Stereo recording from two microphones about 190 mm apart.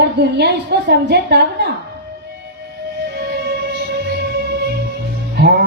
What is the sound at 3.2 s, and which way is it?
Music, 55° right (ahead or behind).